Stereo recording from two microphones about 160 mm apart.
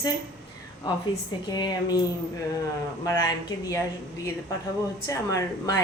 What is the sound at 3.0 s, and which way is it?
Speech, 20° left (ahead or behind).